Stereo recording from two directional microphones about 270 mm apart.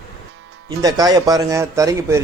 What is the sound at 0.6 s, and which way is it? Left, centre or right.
Speech, centre.